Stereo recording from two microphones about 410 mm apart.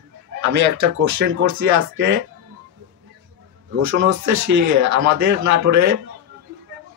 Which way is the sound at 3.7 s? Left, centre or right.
Right.